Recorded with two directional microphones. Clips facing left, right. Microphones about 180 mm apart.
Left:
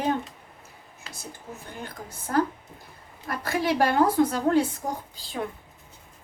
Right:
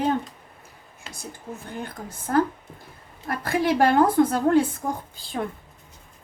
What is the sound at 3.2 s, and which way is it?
A woman's voice, 55° right (ahead or behind).